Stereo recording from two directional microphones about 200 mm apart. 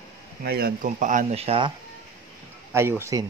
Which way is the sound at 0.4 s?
50° right (ahead or behind).